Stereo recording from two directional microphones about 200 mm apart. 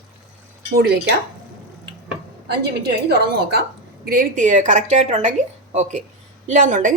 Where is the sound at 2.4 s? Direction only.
55° right (ahead or behind).